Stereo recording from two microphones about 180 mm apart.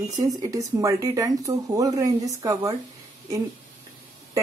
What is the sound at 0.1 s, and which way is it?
Speech, 20° right (ahead or behind).